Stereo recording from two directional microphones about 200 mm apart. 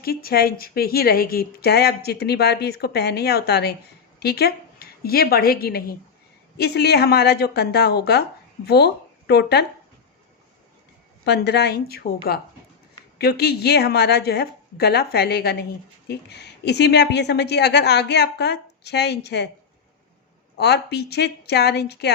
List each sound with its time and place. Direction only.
0.0 s a woman's voice: 50° left (ahead or behind)
11.3 s a woman's voice: 55° left (ahead or behind)
20.6 s a woman's voice: 55° left (ahead or behind)